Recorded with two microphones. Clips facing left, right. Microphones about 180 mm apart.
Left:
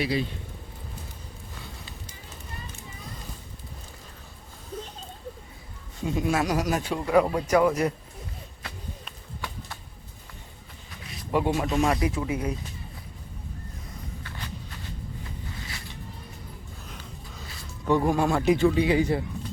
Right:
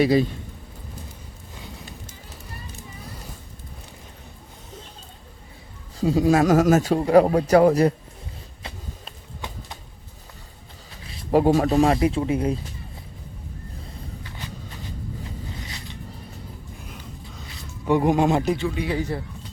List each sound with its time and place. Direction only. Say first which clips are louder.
0.0 s speech: right 9 dB; 45° right (ahead or behind)
6.0 s a man's voice: right 8 dB; 35° right (ahead or behind)
11.0 s speech: right 7 dB; 30° right (ahead or behind)
17.8 s speech: right 4 dB; 15° right (ahead or behind)
18.9 s speech: left 3 dB; 15° left (ahead or behind)